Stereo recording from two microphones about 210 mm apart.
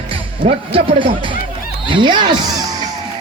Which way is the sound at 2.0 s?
20° right (ahead or behind).